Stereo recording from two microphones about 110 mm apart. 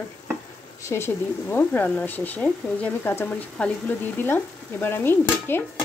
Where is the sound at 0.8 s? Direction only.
25° left (ahead or behind).